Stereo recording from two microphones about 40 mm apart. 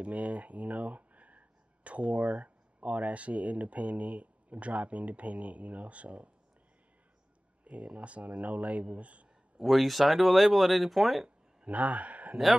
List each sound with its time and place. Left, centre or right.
0.0 s speech: right
7.6 s speech: right
9.6 s speech: centre
11.2 s a sound: right